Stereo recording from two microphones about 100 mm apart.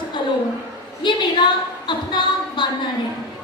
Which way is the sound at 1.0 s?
50° left (ahead or behind).